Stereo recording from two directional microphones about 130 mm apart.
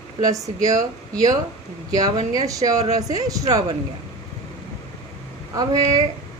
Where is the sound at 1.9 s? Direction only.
30° right (ahead or behind).